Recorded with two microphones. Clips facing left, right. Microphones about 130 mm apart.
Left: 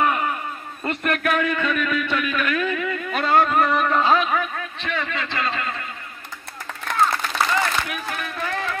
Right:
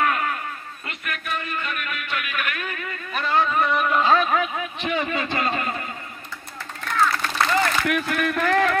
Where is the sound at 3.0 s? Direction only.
75° left (ahead or behind); by 3.6 s 55° left (ahead or behind).